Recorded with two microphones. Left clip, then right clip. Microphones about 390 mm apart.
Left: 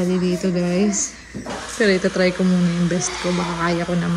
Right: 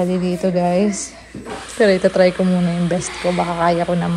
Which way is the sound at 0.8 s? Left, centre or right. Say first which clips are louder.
Even; centre.